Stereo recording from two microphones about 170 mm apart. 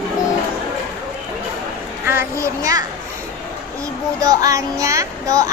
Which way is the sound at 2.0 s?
15° right (ahead or behind).